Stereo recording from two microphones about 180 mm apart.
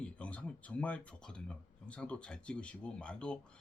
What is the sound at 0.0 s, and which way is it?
Speech, 5° left (ahead or behind).